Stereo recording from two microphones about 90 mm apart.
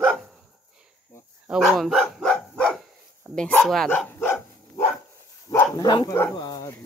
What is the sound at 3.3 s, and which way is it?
Speech, 15° left (ahead or behind).